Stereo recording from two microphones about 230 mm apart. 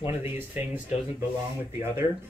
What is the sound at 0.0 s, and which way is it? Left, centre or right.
Speech, centre.